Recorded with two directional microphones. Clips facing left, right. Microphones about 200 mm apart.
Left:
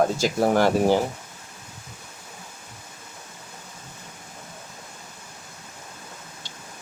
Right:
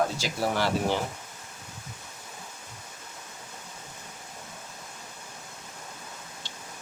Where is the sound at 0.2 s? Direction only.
50° left (ahead or behind).